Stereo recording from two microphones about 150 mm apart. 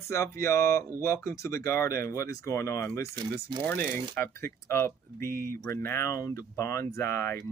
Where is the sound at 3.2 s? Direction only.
30° right (ahead or behind).